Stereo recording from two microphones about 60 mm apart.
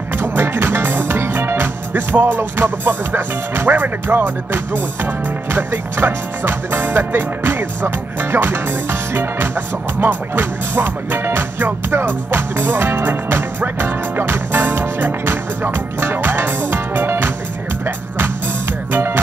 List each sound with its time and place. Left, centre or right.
0.2 s music: right